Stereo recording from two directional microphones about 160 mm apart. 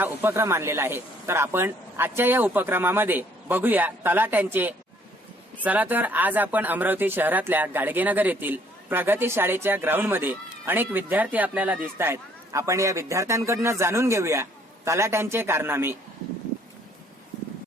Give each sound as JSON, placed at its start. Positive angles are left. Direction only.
{"t": 0.0, "sound": "speech", "side_deg": -15}